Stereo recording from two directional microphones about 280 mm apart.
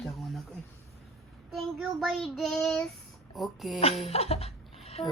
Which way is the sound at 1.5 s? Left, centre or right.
Centre.